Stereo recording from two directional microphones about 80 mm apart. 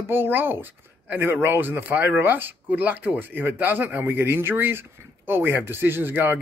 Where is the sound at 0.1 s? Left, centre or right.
Right.